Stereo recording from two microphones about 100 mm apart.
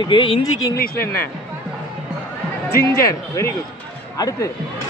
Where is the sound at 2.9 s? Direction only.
30° left (ahead or behind).